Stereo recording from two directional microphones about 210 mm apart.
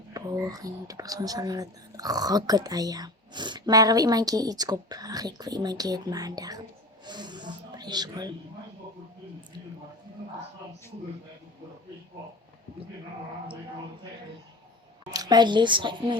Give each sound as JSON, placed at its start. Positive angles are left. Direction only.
{"t": 0.1, "sound": "speech", "side_deg": -15}
{"t": 7.0, "sound": "snake", "side_deg": -20}
{"t": 15.1, "sound": "speech", "side_deg": -20}